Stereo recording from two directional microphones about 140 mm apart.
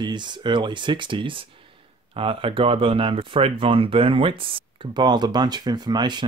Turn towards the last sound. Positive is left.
turn(degrees=-30)  # may be behind; listen again after turning